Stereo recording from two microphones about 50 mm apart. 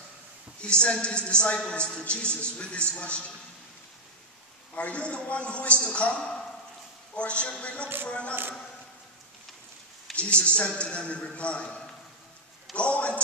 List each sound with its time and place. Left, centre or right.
0.6 s a man's voice: centre
4.7 s a man's voice: left
10.1 s a man's voice: left